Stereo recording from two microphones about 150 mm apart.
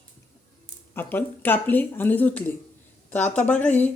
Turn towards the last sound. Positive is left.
turn(degrees=10)  # may be behind; listen again after turning